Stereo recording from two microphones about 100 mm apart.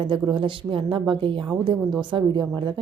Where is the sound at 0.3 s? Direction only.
60° right (ahead or behind).